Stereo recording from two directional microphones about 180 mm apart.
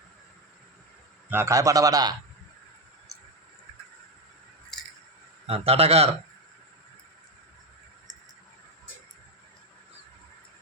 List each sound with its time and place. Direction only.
1.3 s a man's voice: 15° right (ahead or behind)
5.5 s a man's voice: 35° right (ahead or behind)